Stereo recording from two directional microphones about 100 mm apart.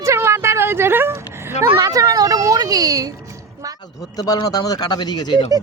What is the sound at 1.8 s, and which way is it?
Speech, 35° right (ahead or behind).